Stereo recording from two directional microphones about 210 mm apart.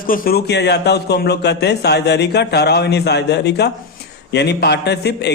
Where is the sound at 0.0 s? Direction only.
45° left (ahead or behind).